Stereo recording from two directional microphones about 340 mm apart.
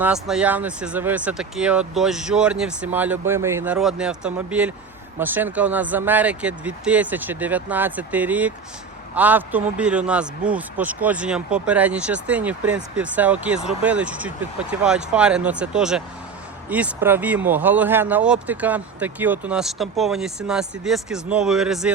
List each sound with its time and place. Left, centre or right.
0.0 s speech: centre